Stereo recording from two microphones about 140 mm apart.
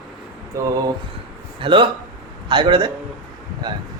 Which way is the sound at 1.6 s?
35° right (ahead or behind).